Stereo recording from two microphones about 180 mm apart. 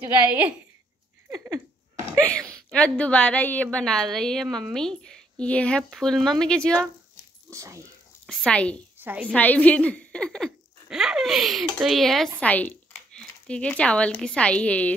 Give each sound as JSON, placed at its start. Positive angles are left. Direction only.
{"t": 0.0, "sound": "a woman's voice", "side_deg": -10}
{"t": 1.3, "sound": "a sound", "side_deg": -20}
{"t": 2.1, "sound": "a woman's voice", "side_deg": 5}
{"t": 7.4, "sound": "speech", "side_deg": -15}
{"t": 8.3, "sound": "a woman's voice", "side_deg": 5}
{"t": 8.9, "sound": "a woman's voice", "side_deg": -10}
{"t": 9.3, "sound": "a woman's voice", "side_deg": 10}